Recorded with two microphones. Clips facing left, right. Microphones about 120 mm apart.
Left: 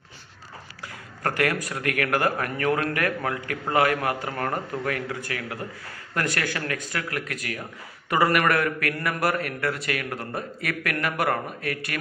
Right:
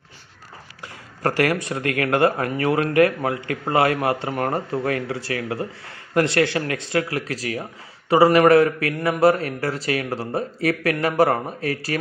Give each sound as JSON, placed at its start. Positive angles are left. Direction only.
{"t": 1.2, "sound": "a man's voice", "side_deg": -30}